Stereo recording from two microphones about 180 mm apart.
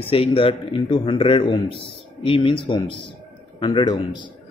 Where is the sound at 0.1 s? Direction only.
30° left (ahead or behind).